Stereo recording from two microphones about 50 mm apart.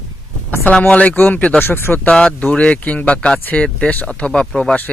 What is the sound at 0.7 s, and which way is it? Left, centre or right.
Speech, left.